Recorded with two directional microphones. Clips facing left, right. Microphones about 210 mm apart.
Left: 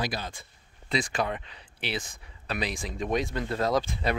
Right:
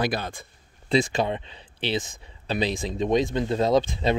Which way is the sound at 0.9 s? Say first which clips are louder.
Right 6 dB; 25° right (ahead or behind).